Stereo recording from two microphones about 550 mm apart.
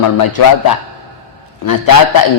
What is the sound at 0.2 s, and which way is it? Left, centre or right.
A man's voice, left.